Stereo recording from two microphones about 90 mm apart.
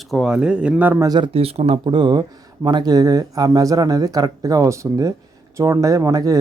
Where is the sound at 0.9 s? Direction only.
40° right (ahead or behind).